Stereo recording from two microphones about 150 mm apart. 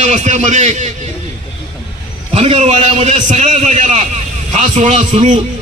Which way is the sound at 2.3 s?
45° right (ahead or behind).